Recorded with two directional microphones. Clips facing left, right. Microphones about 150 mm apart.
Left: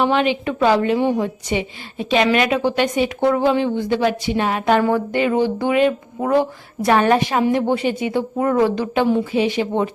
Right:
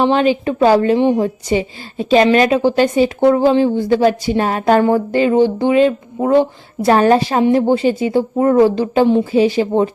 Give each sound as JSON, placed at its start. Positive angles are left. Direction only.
{"t": 0.0, "sound": "speech", "side_deg": -35}
{"t": 0.9, "sound": "a woman's voice", "side_deg": -20}
{"t": 1.2, "sound": "speech", "side_deg": -35}